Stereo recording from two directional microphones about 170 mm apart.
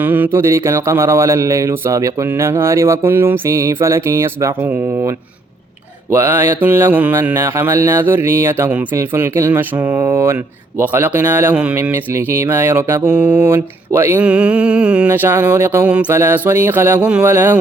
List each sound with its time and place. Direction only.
0.0 s speech: 10° right (ahead or behind)